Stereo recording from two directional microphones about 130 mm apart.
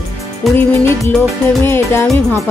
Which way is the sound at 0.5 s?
20° left (ahead or behind).